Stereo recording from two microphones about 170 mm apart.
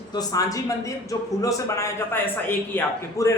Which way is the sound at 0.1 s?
20° left (ahead or behind).